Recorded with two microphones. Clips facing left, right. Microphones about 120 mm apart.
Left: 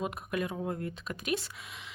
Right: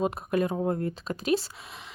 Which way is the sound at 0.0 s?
35° right (ahead or behind).